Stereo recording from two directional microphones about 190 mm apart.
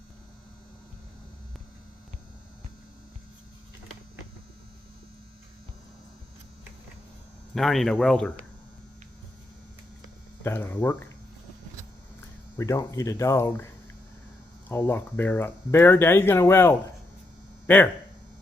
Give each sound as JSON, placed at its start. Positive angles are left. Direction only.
{"t": 7.5, "sound": "speech", "side_deg": 0}
{"t": 10.4, "sound": "speech", "side_deg": 10}
{"t": 12.5, "sound": "speech", "side_deg": 15}
{"t": 14.7, "sound": "speech", "side_deg": 10}